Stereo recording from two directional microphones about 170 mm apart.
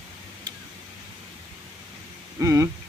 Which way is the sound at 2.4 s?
20° right (ahead or behind).